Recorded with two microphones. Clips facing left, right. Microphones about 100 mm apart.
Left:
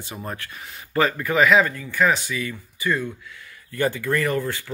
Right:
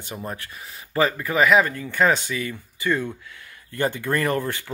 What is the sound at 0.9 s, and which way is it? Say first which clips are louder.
Speech: left 1 dB; 20° right (ahead or behind).